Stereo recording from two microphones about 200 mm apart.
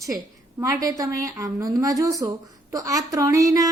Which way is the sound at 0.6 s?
15° right (ahead or behind).